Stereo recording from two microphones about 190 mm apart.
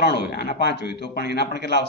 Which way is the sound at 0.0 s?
60° left (ahead or behind).